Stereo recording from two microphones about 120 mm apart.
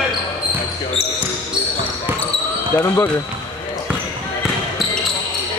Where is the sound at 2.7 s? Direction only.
20° left (ahead or behind).